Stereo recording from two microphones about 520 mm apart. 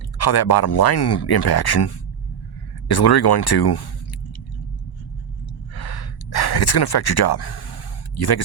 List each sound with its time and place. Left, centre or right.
0.2 s speech: left
2.9 s speech: left
5.7 s gasp: left